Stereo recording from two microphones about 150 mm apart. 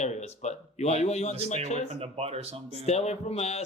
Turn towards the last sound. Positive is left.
turn(degrees=45)  # may be behind; listen again after turning